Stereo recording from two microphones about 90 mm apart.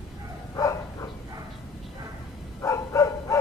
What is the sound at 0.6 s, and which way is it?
Dog, 40° left (ahead or behind).